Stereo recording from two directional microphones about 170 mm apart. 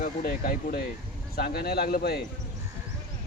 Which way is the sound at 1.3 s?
65° left (ahead or behind).